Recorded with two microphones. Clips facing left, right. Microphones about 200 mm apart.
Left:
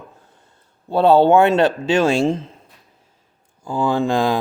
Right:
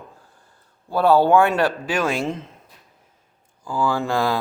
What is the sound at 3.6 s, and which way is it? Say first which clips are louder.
Speech: left 3 dB; 20° left (ahead or behind).